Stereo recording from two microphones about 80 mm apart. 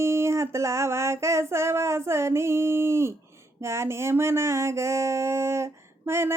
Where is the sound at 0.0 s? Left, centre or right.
Right.